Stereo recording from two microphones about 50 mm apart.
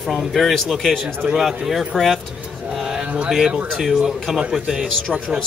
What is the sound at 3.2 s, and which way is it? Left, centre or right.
A man's voice, centre.